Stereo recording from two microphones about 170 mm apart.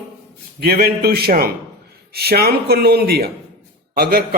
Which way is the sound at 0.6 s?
65° right (ahead or behind).